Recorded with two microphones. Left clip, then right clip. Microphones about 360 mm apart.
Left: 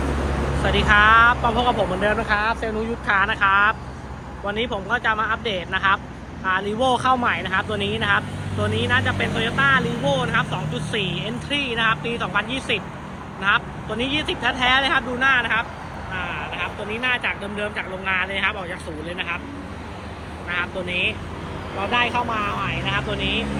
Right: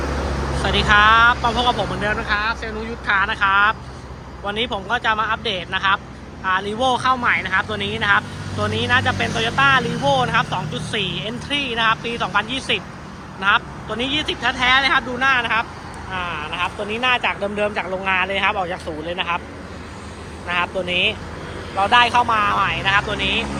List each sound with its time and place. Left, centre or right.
0.6 s speech: centre
20.5 s speech: centre
23.2 s speech: centre